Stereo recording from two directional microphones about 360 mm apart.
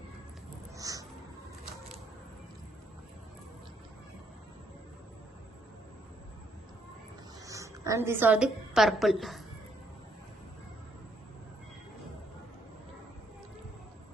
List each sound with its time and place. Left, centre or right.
0.8 s crow: centre
7.4 s a woman's voice: centre